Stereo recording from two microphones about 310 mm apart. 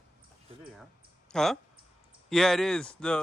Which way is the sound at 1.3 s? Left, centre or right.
Centre.